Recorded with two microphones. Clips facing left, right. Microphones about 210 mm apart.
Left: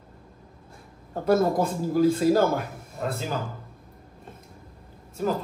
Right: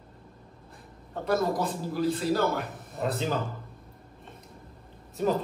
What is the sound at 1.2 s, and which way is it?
Speech, 50° left (ahead or behind).